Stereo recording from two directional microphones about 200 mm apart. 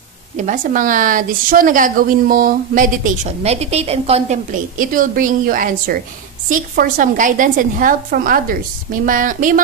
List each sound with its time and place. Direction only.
0.4 s a woman's voice: 40° right (ahead or behind)